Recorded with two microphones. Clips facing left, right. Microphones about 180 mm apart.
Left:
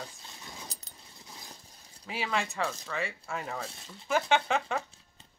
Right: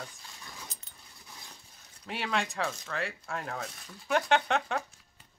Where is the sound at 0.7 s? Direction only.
35° left (ahead or behind).